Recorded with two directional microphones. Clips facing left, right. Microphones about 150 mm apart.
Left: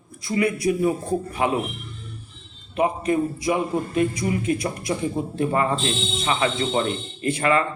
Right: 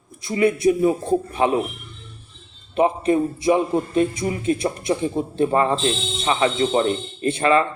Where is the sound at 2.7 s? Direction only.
25° right (ahead or behind).